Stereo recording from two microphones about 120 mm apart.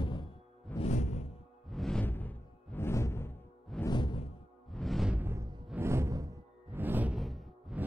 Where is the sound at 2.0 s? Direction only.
15° left (ahead or behind).